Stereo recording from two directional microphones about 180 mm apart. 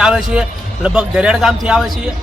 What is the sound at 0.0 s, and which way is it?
A man's voice, 5° right (ahead or behind).